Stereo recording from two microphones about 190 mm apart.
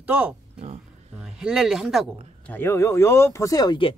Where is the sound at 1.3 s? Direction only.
5° right (ahead or behind).